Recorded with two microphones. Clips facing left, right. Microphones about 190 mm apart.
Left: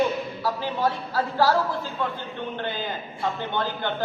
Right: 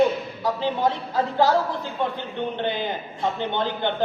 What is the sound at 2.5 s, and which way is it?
A woman's voice, 20° right (ahead or behind).